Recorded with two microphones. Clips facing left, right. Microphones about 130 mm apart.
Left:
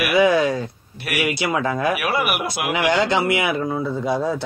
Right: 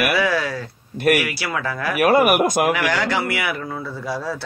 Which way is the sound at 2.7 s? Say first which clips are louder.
Left 2 dB; 20° left (ahead or behind).